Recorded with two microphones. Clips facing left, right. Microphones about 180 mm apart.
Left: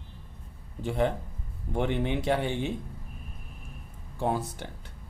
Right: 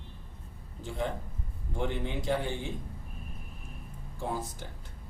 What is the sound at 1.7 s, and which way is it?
Speech, 65° left (ahead or behind).